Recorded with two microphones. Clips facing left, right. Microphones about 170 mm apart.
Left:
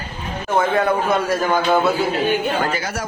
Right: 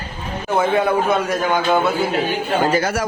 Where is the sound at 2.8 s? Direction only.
70° right (ahead or behind).